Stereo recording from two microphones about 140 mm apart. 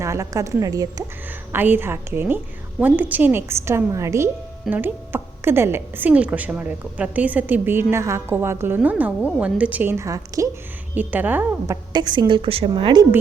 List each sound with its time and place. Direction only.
0.0 s a woman's voice: 20° right (ahead or behind)
1.5 s a woman's voice: 15° right (ahead or behind)
10.9 s a woman's voice: 10° right (ahead or behind)
11.7 s a woman's voice: 30° right (ahead or behind)